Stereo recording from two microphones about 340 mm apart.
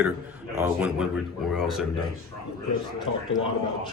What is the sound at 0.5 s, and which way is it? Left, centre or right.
A man's voice, centre.